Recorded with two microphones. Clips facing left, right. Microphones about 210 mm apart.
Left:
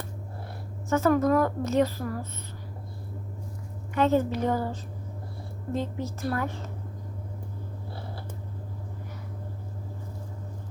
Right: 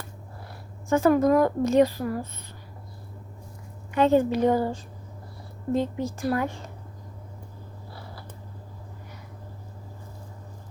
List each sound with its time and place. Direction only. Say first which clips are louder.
0.9 s a woman's voice: right 3 dB; 15° right (ahead or behind)
3.9 s a woman's voice: right 3 dB; 15° right (ahead or behind)